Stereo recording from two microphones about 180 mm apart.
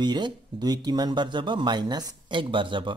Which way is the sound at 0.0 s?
25° right (ahead or behind).